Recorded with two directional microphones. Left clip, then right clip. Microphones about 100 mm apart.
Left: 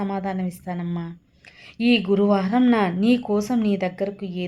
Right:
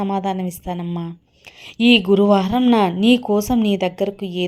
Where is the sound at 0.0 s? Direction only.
35° right (ahead or behind).